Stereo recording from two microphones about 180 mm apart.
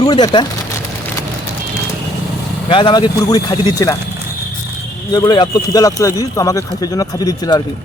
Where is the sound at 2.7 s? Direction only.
25° left (ahead or behind).